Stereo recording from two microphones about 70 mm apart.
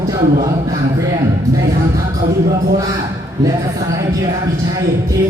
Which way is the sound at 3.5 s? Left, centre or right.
Right.